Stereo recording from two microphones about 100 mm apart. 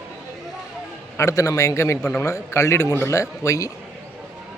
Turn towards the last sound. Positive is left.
turn(degrees=30)  # may be behind; listen again after turning